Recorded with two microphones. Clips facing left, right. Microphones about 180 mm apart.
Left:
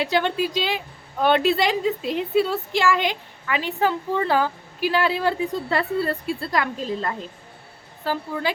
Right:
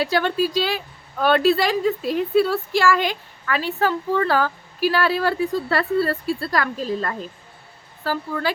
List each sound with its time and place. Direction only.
0.0 s a woman's voice: 20° left (ahead or behind)